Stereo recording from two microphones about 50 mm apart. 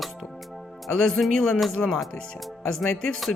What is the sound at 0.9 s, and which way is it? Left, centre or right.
Speech, centre.